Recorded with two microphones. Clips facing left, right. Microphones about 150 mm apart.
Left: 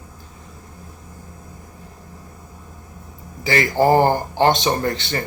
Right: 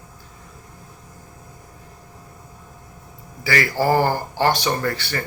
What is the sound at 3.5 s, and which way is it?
Speech, 20° left (ahead or behind).